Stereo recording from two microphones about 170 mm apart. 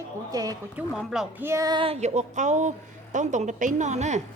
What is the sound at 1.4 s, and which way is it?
Speech, 15° right (ahead or behind).